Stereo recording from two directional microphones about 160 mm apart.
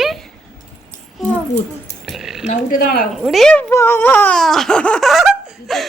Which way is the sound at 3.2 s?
Centre (ahead or behind).